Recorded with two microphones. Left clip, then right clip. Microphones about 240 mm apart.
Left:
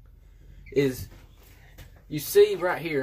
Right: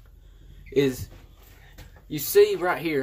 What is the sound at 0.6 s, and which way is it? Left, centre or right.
Speech, centre.